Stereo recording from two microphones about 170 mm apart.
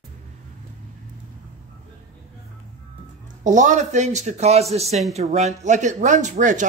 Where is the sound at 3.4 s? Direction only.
45° right (ahead or behind).